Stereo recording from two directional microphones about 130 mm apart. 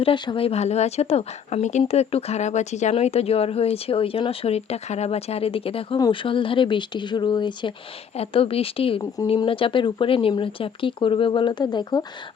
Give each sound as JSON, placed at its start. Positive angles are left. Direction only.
{"t": 0.0, "sound": "speech", "side_deg": 45}
{"t": 2.9, "sound": "speech", "side_deg": 50}
{"t": 8.1, "sound": "speech", "side_deg": 50}